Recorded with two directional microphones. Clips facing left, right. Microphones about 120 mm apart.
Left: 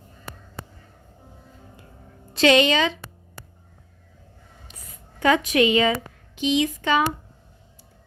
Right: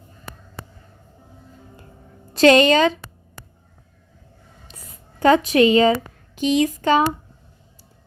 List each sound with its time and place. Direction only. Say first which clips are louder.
2.3 s a woman's voice: right 4 dB; 40° right (ahead or behind)
5.2 s a woman's voice: right 4 dB; 35° right (ahead or behind)